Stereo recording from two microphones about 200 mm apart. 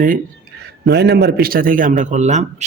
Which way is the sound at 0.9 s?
55° right (ahead or behind).